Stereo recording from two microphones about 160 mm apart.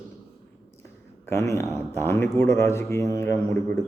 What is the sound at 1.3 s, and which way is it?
Speech, 20° left (ahead or behind).